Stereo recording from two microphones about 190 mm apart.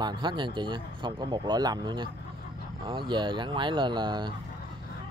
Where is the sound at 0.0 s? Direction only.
25° right (ahead or behind).